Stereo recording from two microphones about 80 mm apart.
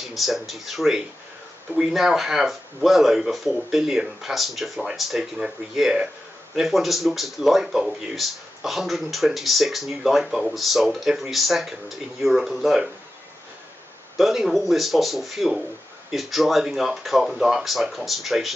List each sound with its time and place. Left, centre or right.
0.0 s speech: centre
14.1 s speech: centre